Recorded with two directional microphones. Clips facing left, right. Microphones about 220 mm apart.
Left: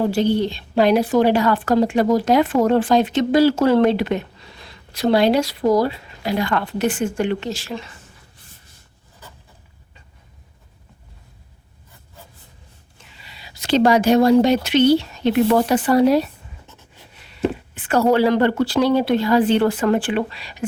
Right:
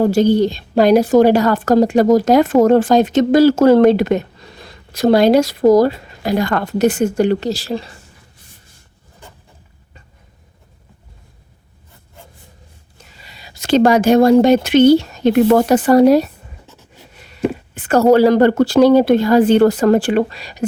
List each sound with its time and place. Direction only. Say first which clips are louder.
0.0 s a woman's voice: right 6 dB; 45° right (ahead or behind)
13.0 s speech: right 3 dB; 40° right (ahead or behind)
17.7 s a woman's voice: right 6 dB; 45° right (ahead or behind)